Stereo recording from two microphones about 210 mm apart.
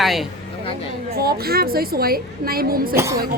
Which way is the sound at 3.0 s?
15° right (ahead or behind).